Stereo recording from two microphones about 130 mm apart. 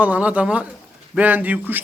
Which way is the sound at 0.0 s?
10° right (ahead or behind).